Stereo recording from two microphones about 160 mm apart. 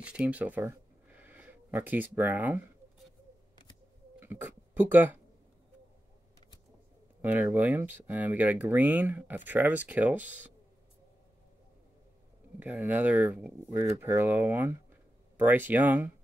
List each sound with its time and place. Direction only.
0.0 s speech: 5° right (ahead or behind)
4.2 s a sound: 10° right (ahead or behind)
7.2 s speech: 10° right (ahead or behind)
12.5 s speech: 10° right (ahead or behind)